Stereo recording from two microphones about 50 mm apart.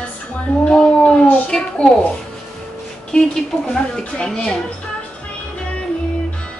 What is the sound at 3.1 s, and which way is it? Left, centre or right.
A woman's voice, centre.